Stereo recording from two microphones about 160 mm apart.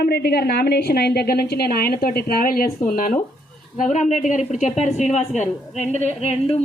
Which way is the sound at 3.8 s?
50° left (ahead or behind).